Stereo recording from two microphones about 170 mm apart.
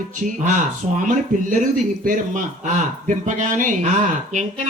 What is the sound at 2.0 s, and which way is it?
A man's voice, 50° right (ahead or behind).